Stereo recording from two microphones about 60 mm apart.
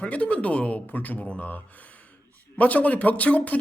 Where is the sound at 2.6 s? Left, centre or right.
Left.